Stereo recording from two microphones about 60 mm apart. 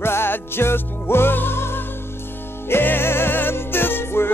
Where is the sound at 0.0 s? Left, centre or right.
Left.